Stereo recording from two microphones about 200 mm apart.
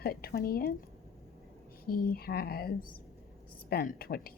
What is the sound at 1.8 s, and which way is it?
A woman's voice, 45° left (ahead or behind).